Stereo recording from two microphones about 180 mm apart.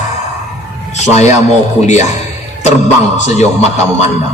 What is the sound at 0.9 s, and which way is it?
Speech, 40° left (ahead or behind).